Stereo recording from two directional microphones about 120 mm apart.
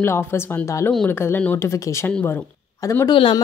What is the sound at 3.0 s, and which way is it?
Speech, 45° left (ahead or behind).